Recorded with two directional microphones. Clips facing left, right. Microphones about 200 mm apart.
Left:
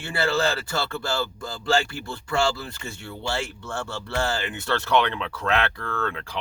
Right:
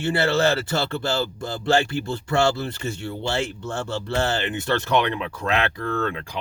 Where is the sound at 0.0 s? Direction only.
20° right (ahead or behind).